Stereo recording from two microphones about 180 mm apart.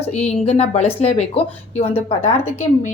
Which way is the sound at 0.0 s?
40° left (ahead or behind).